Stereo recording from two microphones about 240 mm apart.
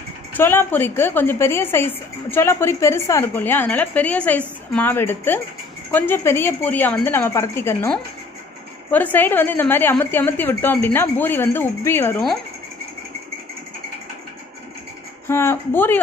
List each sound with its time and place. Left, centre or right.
0.4 s a woman's voice: centre
15.2 s a woman's voice: centre